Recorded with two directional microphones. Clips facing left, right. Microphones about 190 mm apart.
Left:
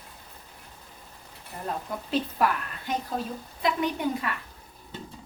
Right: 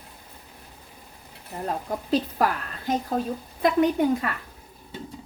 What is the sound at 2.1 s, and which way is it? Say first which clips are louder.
A woman's voice: right 2 dB; 40° right (ahead or behind).